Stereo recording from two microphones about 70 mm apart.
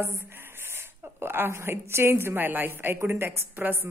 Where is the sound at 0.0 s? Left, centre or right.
Right.